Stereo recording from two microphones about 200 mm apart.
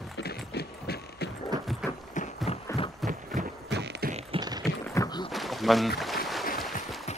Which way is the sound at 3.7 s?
55° right (ahead or behind).